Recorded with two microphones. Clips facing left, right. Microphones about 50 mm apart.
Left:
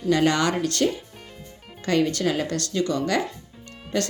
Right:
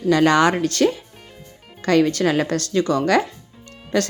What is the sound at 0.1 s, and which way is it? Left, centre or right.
Speech, right.